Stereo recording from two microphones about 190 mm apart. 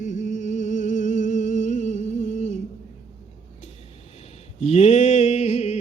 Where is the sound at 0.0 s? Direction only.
40° left (ahead or behind).